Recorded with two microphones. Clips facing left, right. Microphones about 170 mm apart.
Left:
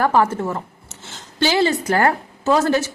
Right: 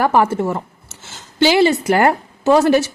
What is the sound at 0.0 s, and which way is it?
A woman's voice, 15° right (ahead or behind).